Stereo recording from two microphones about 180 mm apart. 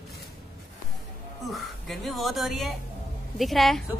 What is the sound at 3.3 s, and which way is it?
Speech, centre (ahead or behind).